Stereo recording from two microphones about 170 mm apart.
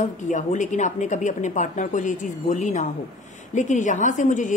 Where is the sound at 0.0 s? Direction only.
45° left (ahead or behind).